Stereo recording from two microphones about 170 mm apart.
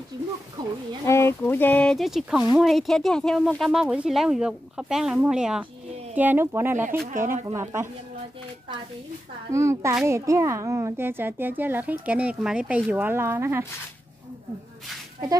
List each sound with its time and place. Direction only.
1.0 s speech: 15° left (ahead or behind); by 7.9 s 15° right (ahead or behind)
9.5 s speech: 15° right (ahead or behind)